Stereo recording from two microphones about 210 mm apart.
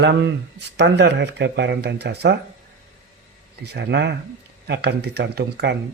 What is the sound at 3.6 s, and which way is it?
Speech, 50° right (ahead or behind).